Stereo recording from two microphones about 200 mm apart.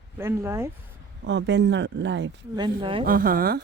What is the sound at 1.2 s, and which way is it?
Speech, 60° right (ahead or behind).